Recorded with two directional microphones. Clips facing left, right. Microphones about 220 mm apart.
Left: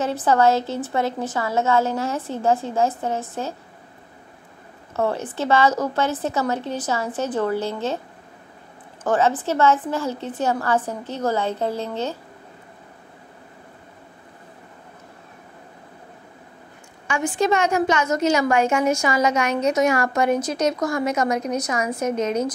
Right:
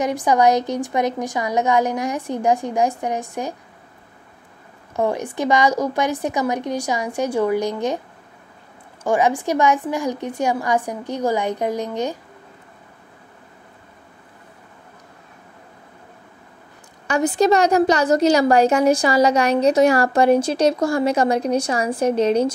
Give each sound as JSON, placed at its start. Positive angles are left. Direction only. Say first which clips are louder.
{"t": 0.0, "sound": "a woman's voice", "louder": "right 1 dB", "side_deg": -15}
{"t": 4.9, "sound": "a woman's voice", "louder": "right 2 dB", "side_deg": -15}
{"t": 9.0, "sound": "a woman's voice", "louder": "right 1 dB", "side_deg": -10}
{"t": 17.1, "sound": "a woman's voice", "louder": "right 4 dB", "side_deg": -35}